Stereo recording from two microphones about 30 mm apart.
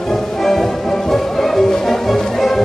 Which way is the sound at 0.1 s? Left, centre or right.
Centre.